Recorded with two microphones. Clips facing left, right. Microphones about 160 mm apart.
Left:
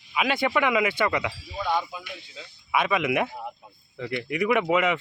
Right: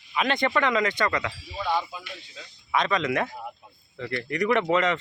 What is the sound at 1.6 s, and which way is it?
Speech, 5° right (ahead or behind).